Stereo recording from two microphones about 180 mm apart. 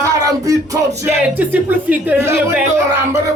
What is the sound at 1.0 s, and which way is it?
Speech, 10° right (ahead or behind).